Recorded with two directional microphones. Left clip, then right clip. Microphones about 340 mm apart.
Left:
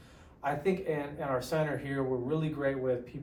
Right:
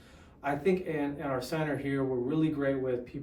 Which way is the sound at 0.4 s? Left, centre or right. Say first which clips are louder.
Right 1 dB; centre.